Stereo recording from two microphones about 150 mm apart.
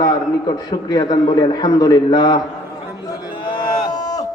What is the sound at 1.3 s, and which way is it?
A man's voice, 30° left (ahead or behind).